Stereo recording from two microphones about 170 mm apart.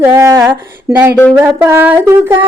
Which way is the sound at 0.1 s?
15° right (ahead or behind).